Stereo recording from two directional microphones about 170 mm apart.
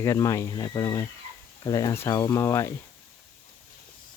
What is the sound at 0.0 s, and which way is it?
Speech, 15° left (ahead or behind).